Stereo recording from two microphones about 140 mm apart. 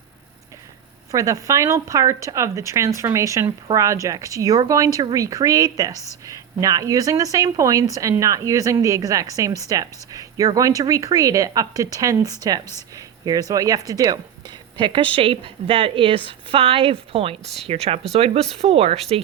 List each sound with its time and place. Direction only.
1.1 s speech: 25° right (ahead or behind); by 17.3 s 40° right (ahead or behind)
17.4 s speech: centre (ahead or behind)
17.7 s speech: 45° right (ahead or behind)